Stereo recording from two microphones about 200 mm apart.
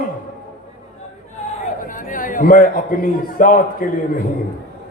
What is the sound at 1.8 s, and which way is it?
A man's voice, 40° left (ahead or behind).